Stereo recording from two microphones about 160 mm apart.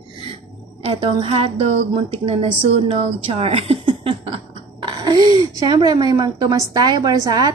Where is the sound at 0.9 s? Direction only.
40° right (ahead or behind).